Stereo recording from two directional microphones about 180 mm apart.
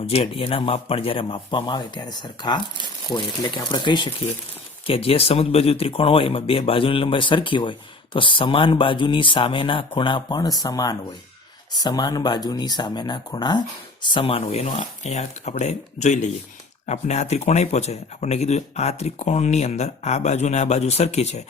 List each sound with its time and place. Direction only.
0.1 s speech: 35° left (ahead or behind)